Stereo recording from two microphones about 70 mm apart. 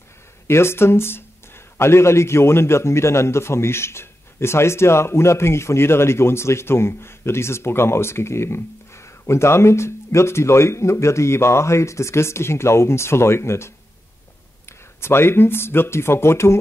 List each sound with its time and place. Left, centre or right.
0.5 s speech: left